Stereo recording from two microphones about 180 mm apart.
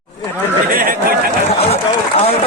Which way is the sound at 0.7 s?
50° right (ahead or behind).